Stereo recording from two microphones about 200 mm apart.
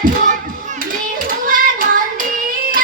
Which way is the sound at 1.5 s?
45° right (ahead or behind).